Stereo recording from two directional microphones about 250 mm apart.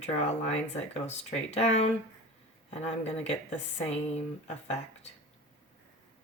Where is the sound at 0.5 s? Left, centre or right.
Left.